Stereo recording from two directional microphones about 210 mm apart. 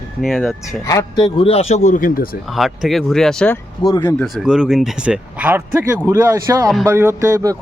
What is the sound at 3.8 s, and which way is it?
Speech, 15° left (ahead or behind).